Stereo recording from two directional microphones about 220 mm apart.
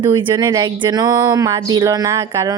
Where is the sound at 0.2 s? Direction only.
20° right (ahead or behind).